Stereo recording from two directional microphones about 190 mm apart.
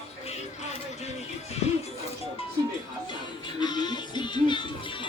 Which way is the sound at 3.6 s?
20° left (ahead or behind).